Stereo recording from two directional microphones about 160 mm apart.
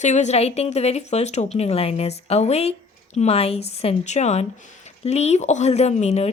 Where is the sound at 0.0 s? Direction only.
45° left (ahead or behind).